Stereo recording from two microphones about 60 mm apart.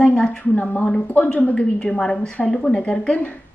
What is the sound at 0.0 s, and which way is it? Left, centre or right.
A woman's voice, left.